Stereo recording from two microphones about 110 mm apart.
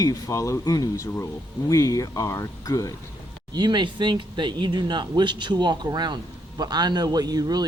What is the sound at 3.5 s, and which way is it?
Speech, 40° right (ahead or behind).